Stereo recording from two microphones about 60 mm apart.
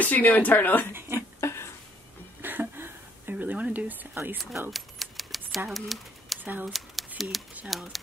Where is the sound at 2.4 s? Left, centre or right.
Right.